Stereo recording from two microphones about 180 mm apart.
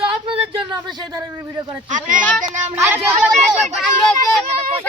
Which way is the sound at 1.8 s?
45° right (ahead or behind).